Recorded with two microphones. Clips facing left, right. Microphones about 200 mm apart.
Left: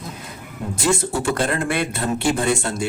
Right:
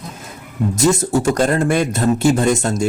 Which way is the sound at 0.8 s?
40° right (ahead or behind).